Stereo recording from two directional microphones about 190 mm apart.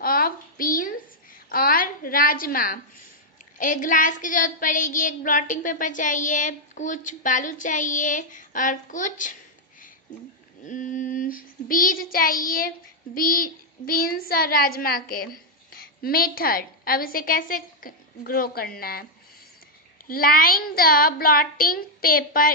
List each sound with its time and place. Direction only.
0.0 s a sound: 50° left (ahead or behind)
3.5 s a woman's voice: 45° left (ahead or behind)
10.6 s child singing: 40° left (ahead or behind)
18.8 s a woman's voice: 50° left (ahead or behind)
20.1 s a woman's voice: 50° left (ahead or behind)